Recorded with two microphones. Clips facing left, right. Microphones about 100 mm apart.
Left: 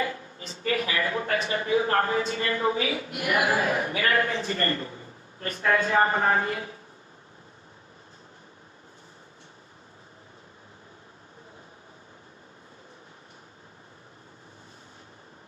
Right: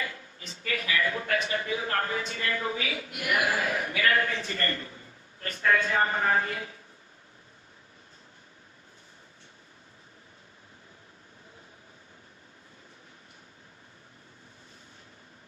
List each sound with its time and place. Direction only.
0.0 s a man's voice: 35° left (ahead or behind)